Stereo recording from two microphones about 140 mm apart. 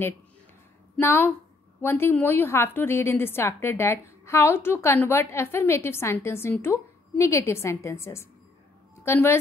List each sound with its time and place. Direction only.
0.9 s a woman's voice: 15° left (ahead or behind)